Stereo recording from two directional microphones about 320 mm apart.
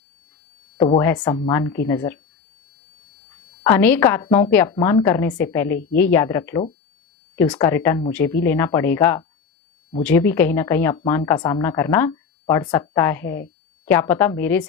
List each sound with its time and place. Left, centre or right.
0.9 s speech: centre
3.6 s speech: centre